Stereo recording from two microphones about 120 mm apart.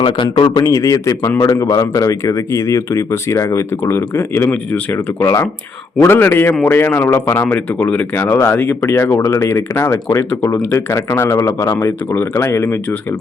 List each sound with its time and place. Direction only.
0.0 s a man's voice: 45° left (ahead or behind); by 12.8 s 20° left (ahead or behind)